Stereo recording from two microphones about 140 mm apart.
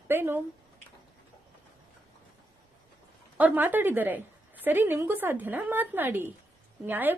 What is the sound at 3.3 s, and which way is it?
A woman's voice, 10° right (ahead or behind).